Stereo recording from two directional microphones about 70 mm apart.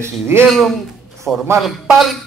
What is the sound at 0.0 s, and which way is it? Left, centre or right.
Speech, right.